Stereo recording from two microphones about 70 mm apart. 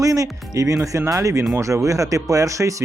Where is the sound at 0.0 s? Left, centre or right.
Right.